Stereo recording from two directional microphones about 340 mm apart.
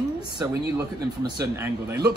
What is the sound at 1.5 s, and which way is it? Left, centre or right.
Speech, centre.